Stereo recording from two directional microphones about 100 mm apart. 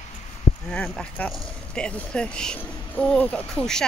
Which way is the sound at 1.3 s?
5° left (ahead or behind).